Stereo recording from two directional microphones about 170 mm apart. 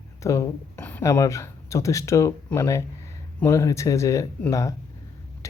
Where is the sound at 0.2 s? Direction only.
20° left (ahead or behind).